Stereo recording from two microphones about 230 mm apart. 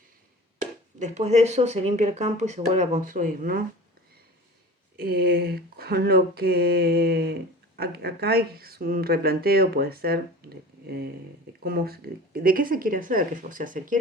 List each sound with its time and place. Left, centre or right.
0.9 s speech: right
4.9 s speech: right